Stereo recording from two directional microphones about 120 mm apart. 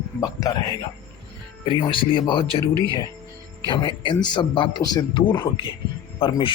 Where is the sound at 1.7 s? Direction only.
45° left (ahead or behind).